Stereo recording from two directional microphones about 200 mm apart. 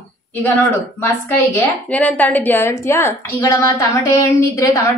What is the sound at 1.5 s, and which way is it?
A woman's voice, 10° left (ahead or behind).